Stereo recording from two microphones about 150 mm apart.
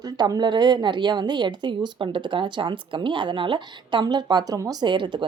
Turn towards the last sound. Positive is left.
turn(degrees=-30)  # may be behind; listen again after turning